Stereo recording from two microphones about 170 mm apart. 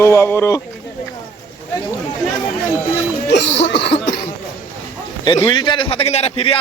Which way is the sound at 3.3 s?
90° left.